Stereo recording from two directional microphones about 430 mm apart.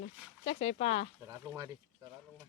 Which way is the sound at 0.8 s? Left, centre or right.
Centre.